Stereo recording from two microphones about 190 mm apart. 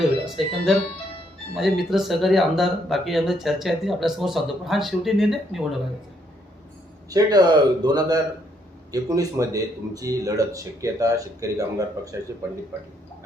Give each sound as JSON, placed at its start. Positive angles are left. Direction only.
{"t": 0.3, "sound": "speech", "side_deg": 0}
{"t": 7.1, "sound": "speech", "side_deg": -20}